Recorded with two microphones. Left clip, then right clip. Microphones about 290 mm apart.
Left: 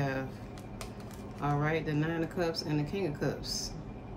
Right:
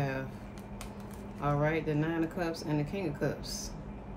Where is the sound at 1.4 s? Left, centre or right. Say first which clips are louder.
Right 1 dB; centre.